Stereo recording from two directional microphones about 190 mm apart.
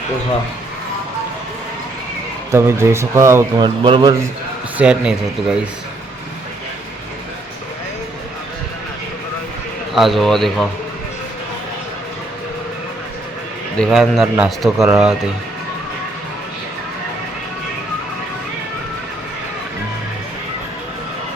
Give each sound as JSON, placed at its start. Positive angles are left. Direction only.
{"t": 2.5, "sound": "speech", "side_deg": -15}
{"t": 3.8, "sound": "a man's voice", "side_deg": -25}
{"t": 4.8, "sound": "a man's voice", "side_deg": -5}
{"t": 9.9, "sound": "a man's voice", "side_deg": 0}
{"t": 13.7, "sound": "a man's voice", "side_deg": 0}